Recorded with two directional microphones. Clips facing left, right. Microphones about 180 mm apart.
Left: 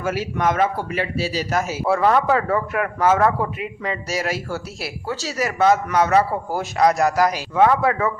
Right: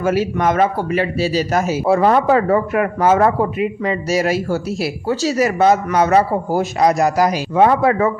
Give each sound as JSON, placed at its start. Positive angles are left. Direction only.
{"t": 0.0, "sound": "speech", "side_deg": -25}
{"t": 0.3, "sound": "speech", "side_deg": -35}
{"t": 3.6, "sound": "speech", "side_deg": -20}
{"t": 5.0, "sound": "speech", "side_deg": -40}
{"t": 5.4, "sound": "speech", "side_deg": -25}
{"t": 6.7, "sound": "a man's voice", "side_deg": -15}
{"t": 7.5, "sound": "speech", "side_deg": -30}